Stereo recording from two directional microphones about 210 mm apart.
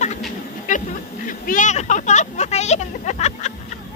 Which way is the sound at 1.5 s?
35° left (ahead or behind).